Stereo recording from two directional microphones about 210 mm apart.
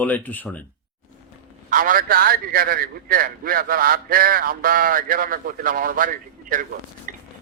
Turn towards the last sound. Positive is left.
turn(degrees=-40)  # may be behind; listen again after turning